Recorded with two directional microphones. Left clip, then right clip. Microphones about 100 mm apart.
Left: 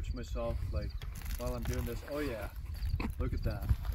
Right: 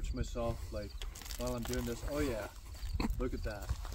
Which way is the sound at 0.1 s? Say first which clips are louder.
Even; 5° left (ahead or behind).